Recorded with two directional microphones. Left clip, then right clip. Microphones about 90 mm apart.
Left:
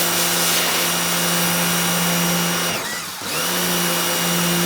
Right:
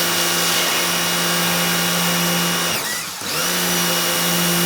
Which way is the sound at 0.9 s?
25° right (ahead or behind).